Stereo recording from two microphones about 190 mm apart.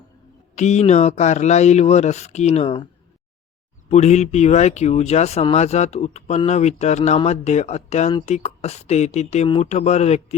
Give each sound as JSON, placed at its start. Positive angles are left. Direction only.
{"t": 0.5, "sound": "speech", "side_deg": 35}
{"t": 3.8, "sound": "speech", "side_deg": 35}